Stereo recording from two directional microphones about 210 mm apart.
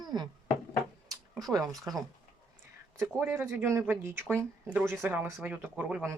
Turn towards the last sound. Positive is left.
turn(degrees=-5)  # may be behind; listen again after turning